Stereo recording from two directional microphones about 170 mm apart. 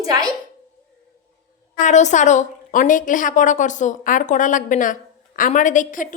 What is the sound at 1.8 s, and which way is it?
A woman's voice, 45° left (ahead or behind).